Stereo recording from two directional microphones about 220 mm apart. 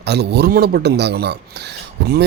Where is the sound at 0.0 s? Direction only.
50° right (ahead or behind).